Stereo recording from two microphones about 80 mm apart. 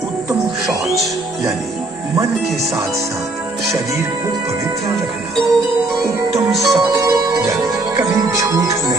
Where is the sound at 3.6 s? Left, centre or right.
Right.